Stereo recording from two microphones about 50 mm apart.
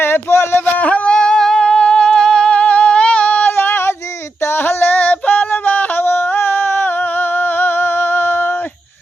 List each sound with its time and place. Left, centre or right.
0.0 s music: left
0.6 s music: left
1.1 s music: centre; by 8.4 s left